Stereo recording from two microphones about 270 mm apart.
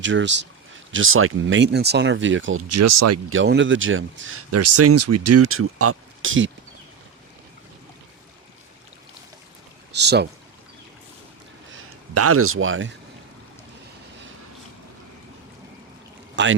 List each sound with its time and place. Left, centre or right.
0.0 s speech: right
3.2 s speech: right
9.9 s speech: right
11.7 s speech: right
16.3 s speech: right